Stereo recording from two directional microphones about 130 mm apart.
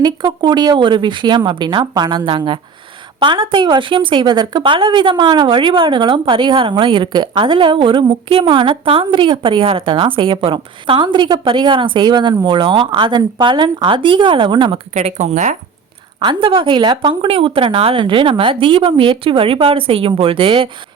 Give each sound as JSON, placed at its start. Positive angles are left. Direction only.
{"t": 0.0, "sound": "a woman's voice", "side_deg": -35}
{"t": 14.9, "sound": "speech", "side_deg": -60}
{"t": 16.2, "sound": "a woman's voice", "side_deg": -40}